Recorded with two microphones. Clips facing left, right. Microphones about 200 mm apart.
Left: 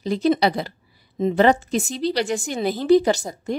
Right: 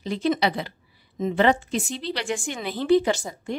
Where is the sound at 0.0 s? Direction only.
40° left (ahead or behind).